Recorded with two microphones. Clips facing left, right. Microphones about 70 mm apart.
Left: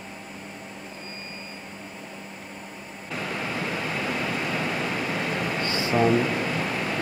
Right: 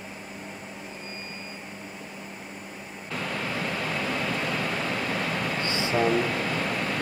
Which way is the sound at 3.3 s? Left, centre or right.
Centre.